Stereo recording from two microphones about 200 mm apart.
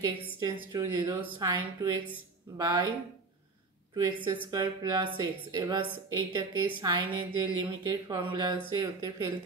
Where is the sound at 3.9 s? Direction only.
20° right (ahead or behind).